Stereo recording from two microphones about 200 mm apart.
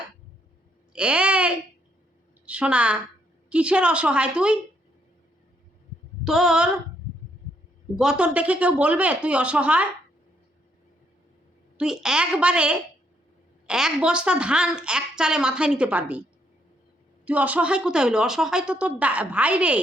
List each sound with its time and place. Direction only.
0.9 s a woman's voice: 5° right (ahead or behind)
6.2 s a woman's voice: centre (ahead or behind)
7.9 s a woman's voice: 5° right (ahead or behind)
11.8 s a woman's voice: 5° right (ahead or behind)
17.2 s a woman's voice: 5° right (ahead or behind)